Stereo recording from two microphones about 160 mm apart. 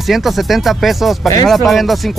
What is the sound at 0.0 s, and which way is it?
Speech, centre (ahead or behind).